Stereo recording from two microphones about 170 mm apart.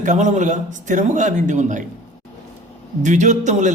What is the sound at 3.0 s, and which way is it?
Speech, 45° right (ahead or behind).